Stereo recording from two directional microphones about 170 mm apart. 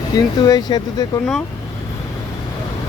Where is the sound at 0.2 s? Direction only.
25° left (ahead or behind).